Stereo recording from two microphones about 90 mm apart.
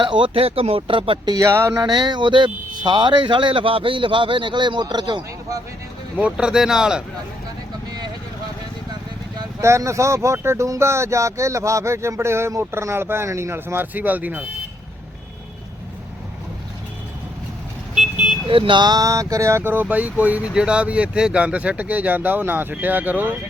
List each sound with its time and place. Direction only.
0.0 s speech: 70° right (ahead or behind)
1.5 s speech: 30° right (ahead or behind)
1.8 s speech: 55° right (ahead or behind)
6.1 s speech: 10° right (ahead or behind)
7.9 s vehicle: 50° right (ahead or behind)
9.6 s speech: 35° right (ahead or behind); by 14.4 s 20° right (ahead or behind)
17.9 s vehicle: 10° right (ahead or behind)
18.4 s speech: 75° right (ahead or behind); by 23.3 s 20° right (ahead or behind)